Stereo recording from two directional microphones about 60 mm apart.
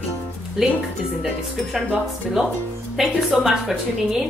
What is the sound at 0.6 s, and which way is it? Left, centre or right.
Speech, centre.